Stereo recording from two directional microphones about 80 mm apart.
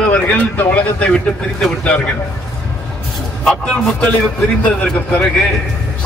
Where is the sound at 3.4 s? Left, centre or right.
Centre.